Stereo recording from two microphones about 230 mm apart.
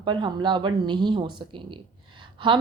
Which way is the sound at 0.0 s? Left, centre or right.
Right.